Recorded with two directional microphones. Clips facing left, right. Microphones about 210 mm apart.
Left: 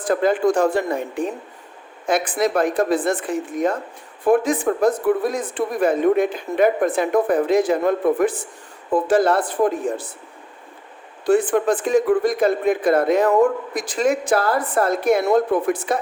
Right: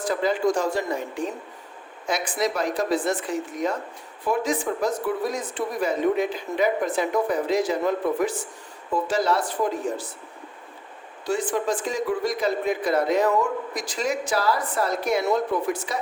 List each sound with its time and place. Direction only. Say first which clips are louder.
0.0 s speech: left 5 dB; 55° left (ahead or behind)
11.3 s speech: left 8 dB; 55° left (ahead or behind)